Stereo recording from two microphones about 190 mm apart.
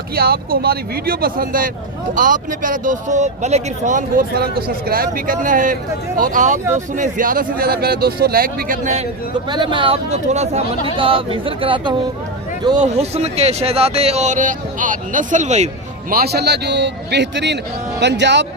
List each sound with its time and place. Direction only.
0.2 s speech: 55° right (ahead or behind)
9.5 s speech: 25° right (ahead or behind)
16.1 s a man's voice: 55° right (ahead or behind)